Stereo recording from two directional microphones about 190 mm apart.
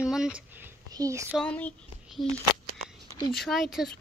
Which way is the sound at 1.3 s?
5° left (ahead or behind).